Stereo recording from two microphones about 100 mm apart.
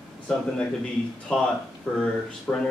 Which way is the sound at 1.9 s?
10° left (ahead or behind).